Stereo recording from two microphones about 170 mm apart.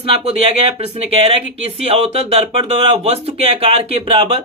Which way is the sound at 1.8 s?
35° right (ahead or behind).